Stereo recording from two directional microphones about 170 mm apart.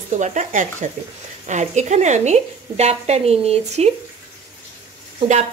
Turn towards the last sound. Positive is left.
turn(degrees=-40)  # may be behind; listen again after turning